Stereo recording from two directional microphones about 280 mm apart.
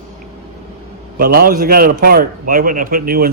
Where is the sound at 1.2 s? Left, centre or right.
Right.